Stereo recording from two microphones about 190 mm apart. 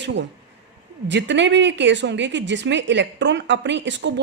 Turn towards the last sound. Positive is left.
turn(degrees=-70)  # may be behind; listen again after turning